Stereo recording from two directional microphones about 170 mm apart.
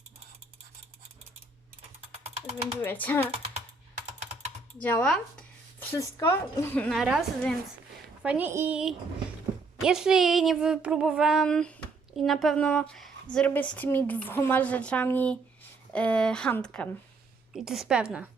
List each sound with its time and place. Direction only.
2.8 s a woman's voice: 10° left (ahead or behind)
3.3 s computer keyboard: 35° right (ahead or behind)
4.8 s a sound: 10° left (ahead or behind)
6.0 s a woman's voice: 15° left (ahead or behind); by 18.3 s 5° right (ahead or behind)